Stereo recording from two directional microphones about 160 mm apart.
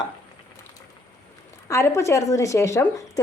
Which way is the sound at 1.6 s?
20° left (ahead or behind).